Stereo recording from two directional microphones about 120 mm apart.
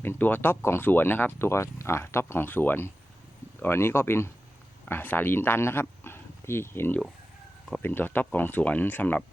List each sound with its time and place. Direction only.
0.0 s speech: 15° left (ahead or behind)